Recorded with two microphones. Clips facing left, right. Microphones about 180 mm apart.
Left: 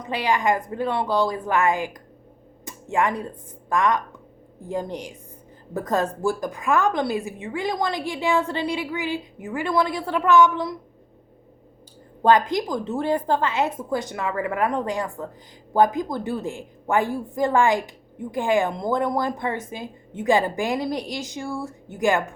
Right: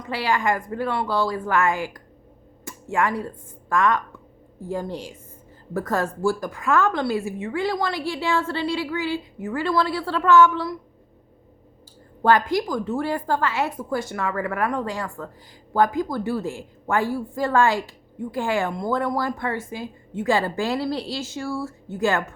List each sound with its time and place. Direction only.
0.0 s a woman's voice: 20° left (ahead or behind)
12.2 s a woman's voice: 20° left (ahead or behind)